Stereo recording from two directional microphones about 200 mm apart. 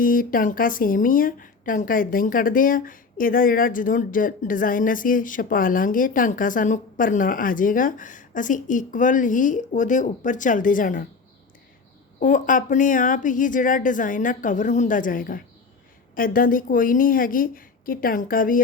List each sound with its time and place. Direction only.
0.0 s speech: 45° left (ahead or behind)
12.2 s a woman's voice: 40° left (ahead or behind)